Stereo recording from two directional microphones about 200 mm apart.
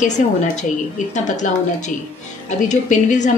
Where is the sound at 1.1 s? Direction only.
35° left (ahead or behind).